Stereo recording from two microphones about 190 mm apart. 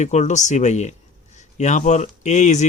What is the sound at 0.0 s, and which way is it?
Speech, 40° left (ahead or behind).